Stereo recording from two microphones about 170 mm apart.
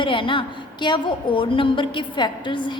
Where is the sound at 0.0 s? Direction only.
30° left (ahead or behind).